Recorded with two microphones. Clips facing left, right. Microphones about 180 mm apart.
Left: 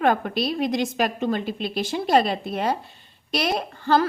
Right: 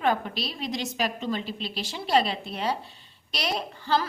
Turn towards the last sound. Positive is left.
turn(degrees=50)  # may be behind; listen again after turning